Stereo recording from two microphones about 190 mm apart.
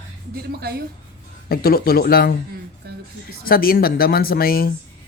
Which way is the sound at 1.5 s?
55° left (ahead or behind).